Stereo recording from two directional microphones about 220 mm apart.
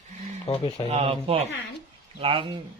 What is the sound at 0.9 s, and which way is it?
Speech, 25° right (ahead or behind).